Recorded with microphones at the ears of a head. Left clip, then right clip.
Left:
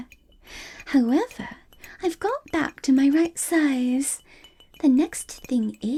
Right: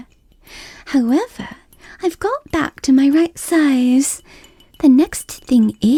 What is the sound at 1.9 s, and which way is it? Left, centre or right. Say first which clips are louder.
Speech: right 6 dB; right.